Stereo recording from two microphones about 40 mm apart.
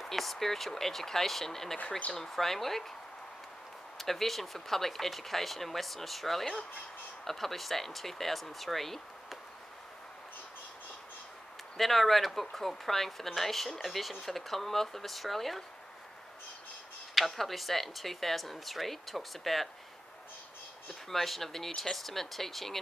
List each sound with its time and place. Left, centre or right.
0.0 s speech: centre
4.0 s speech: centre
11.7 s speech: centre
17.1 s speech: centre
21.1 s speech: centre